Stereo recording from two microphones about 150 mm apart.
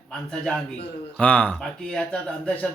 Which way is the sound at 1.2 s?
10° left (ahead or behind).